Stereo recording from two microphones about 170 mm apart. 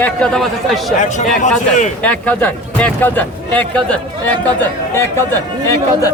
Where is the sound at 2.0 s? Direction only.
10° left (ahead or behind).